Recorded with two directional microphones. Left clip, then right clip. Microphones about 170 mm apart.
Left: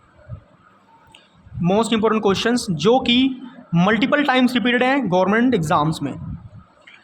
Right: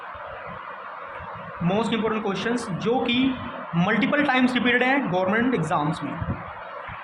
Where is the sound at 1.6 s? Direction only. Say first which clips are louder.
Left 6 dB; 60° left (ahead or behind).